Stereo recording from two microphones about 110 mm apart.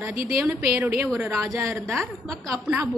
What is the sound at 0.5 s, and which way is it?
A woman's voice, 25° right (ahead or behind).